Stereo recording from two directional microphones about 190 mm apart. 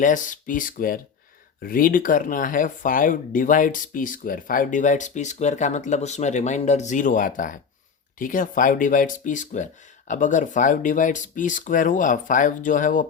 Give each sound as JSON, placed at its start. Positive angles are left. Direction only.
{"t": 0.0, "sound": "speech", "side_deg": 45}